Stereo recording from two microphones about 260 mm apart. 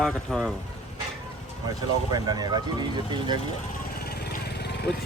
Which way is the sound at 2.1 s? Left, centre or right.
Centre.